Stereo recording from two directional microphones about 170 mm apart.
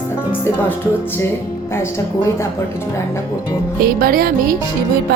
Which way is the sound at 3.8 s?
60° right (ahead or behind).